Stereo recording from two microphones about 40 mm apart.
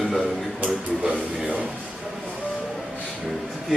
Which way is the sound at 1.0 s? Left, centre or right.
Right.